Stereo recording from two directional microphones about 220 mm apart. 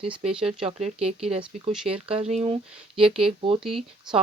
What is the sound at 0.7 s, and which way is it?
Speech, 30° right (ahead or behind).